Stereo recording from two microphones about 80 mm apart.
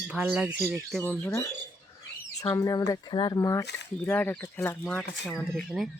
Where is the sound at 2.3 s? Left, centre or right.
Left.